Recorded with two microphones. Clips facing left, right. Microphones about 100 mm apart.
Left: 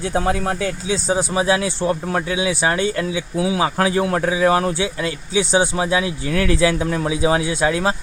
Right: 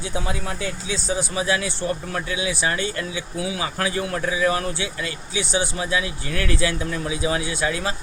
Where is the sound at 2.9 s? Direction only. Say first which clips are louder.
Left 6 dB; 90° left.